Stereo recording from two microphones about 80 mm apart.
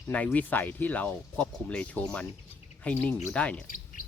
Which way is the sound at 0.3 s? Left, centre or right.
Left.